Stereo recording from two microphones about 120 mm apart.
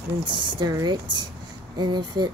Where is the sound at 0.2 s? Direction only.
40° right (ahead or behind).